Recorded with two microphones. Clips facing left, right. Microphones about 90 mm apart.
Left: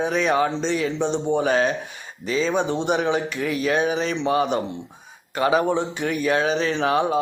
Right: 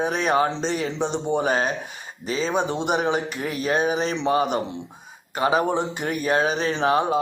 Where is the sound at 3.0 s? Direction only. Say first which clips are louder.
Left 2 dB; 40° right (ahead or behind).